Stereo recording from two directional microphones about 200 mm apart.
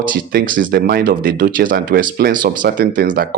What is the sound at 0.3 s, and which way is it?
Speech, 45° right (ahead or behind).